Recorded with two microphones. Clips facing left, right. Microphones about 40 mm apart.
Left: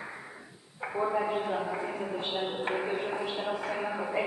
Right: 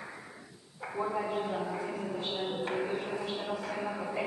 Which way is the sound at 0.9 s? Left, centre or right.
Centre.